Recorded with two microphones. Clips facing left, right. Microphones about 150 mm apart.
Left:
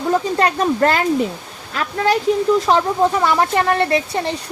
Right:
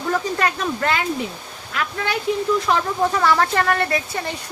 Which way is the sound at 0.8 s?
40° left (ahead or behind).